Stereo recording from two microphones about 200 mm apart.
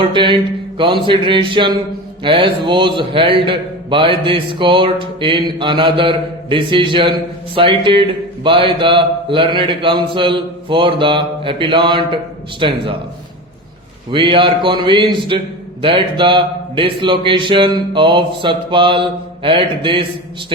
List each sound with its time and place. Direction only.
0.0 s a man's voice: 25° right (ahead or behind)
14.1 s a man's voice: 25° right (ahead or behind)